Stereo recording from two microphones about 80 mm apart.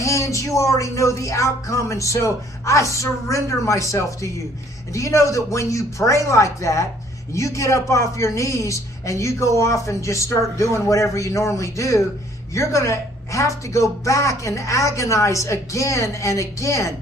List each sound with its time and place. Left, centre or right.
0.0 s a woman's voice: left